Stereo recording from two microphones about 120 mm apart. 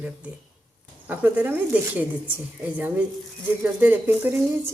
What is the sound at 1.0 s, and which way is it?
Speech, 15° right (ahead or behind).